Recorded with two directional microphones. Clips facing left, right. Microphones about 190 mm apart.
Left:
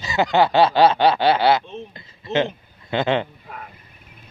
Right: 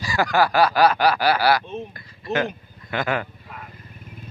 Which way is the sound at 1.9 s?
25° left (ahead or behind).